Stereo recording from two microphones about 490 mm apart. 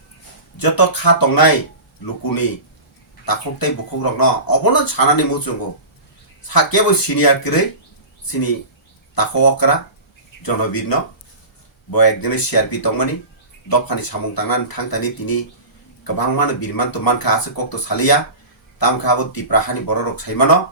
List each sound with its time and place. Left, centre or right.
0.5 s speech: left
3.2 s speech: left
9.1 s speech: left